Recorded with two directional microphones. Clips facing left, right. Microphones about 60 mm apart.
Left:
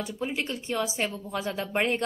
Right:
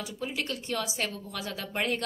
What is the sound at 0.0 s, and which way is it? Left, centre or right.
A woman's voice, left.